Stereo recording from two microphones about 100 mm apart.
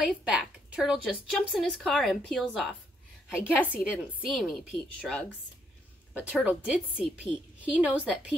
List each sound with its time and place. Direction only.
0.0 s a woman's voice: 10° right (ahead or behind)
3.3 s a woman's voice: 15° left (ahead or behind)
3.6 s a woman's voice: 15° right (ahead or behind)
4.3 s a woman's voice: 5° left (ahead or behind)
6.1 s a woman's voice: 15° right (ahead or behind)